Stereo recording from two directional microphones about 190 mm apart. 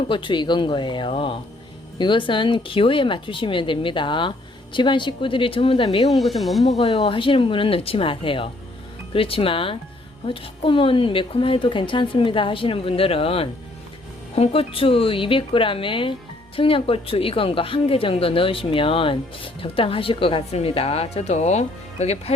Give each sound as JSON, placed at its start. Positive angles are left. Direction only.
{"t": 0.1, "sound": "a woman's voice", "side_deg": 25}
{"t": 6.1, "sound": "speech", "side_deg": 0}
{"t": 7.0, "sound": "a woman's voice", "side_deg": 25}